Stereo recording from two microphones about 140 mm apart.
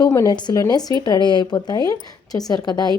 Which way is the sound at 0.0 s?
25° left (ahead or behind).